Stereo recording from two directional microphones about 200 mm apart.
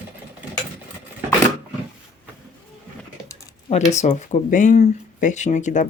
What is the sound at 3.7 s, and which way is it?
Speech, 35° left (ahead or behind).